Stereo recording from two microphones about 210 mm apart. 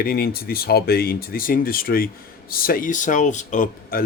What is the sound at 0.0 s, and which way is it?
Speech, 45° left (ahead or behind).